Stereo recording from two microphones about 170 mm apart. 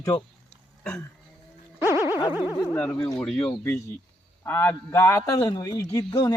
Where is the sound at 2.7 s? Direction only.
5° left (ahead or behind).